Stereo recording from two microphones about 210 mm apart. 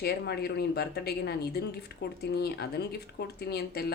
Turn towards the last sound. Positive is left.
turn(degrees=50)  # may be behind; listen again after turning